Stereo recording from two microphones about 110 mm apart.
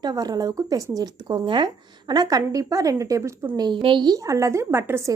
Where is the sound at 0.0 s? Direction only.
35° right (ahead or behind).